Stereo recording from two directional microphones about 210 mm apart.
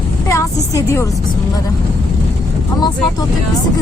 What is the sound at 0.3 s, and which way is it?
Speech, 15° left (ahead or behind).